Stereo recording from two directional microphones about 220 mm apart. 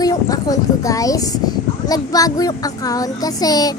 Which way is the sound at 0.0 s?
15° left (ahead or behind).